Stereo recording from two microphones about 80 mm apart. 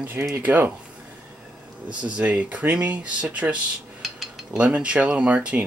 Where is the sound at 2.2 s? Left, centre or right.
Centre.